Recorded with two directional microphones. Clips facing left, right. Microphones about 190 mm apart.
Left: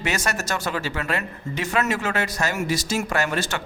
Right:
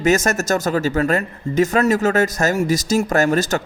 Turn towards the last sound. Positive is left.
turn(degrees=-40)  # may be behind; listen again after turning